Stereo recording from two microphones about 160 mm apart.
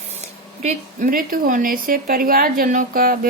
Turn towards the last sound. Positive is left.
turn(degrees=-65)  # may be behind; listen again after turning